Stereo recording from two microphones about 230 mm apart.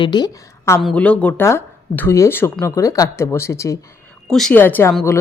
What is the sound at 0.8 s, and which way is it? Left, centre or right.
Speech, centre.